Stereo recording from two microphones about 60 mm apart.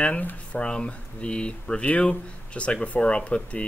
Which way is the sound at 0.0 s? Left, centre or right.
Left.